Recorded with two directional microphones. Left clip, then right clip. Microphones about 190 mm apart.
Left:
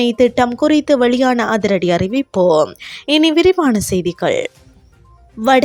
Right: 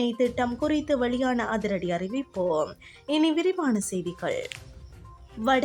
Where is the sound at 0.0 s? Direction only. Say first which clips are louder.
Left 12 dB; 45° left (ahead or behind).